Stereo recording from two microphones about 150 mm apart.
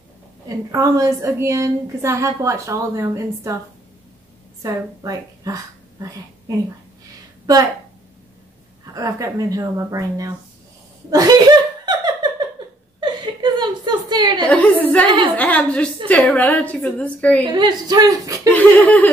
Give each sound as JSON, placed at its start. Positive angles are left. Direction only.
{"t": 0.5, "sound": "a woman's voice", "side_deg": -25}
{"t": 4.6, "sound": "a woman's voice", "side_deg": -25}
{"t": 8.9, "sound": "a woman's voice", "side_deg": -25}
{"t": 11.1, "sound": "laughter", "side_deg": -25}
{"t": 13.0, "sound": "a sound", "side_deg": -30}
{"t": 14.5, "sound": "a woman's voice", "side_deg": 10}
{"t": 15.0, "sound": "a woman's voice", "side_deg": -35}
{"t": 15.3, "sound": "a woman's voice", "side_deg": 10}
{"t": 17.5, "sound": "a woman's voice", "side_deg": -30}
{"t": 18.5, "sound": "a woman's voice", "side_deg": 10}